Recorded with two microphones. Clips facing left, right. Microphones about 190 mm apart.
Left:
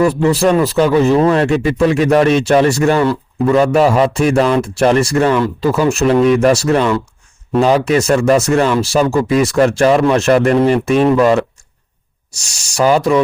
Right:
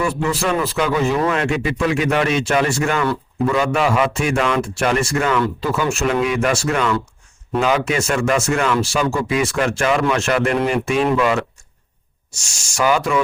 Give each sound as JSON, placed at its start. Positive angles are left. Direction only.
{"t": 0.0, "sound": "speech", "side_deg": 35}